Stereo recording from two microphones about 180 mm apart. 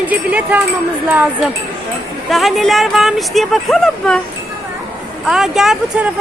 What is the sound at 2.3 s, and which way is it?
Speech, centre (ahead or behind).